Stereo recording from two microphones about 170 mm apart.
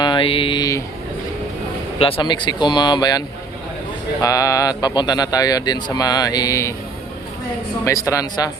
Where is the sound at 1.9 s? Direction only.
30° left (ahead or behind).